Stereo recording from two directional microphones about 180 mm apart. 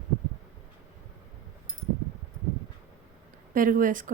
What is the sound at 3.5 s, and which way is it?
Speech, 50° right (ahead or behind).